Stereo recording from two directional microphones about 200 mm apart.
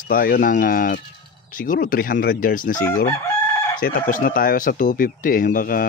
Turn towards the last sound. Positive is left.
turn(degrees=45)  # may be behind; listen again after turning